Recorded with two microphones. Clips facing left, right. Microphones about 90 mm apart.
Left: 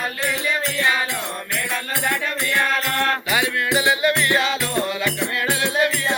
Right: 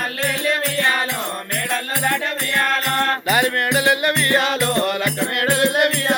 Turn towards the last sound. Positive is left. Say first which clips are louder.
# right 3 dB
turn(degrees=-60)  # may be behind; listen again after turning